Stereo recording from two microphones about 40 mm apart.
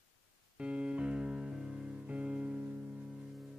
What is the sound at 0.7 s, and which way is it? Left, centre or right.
Music, right.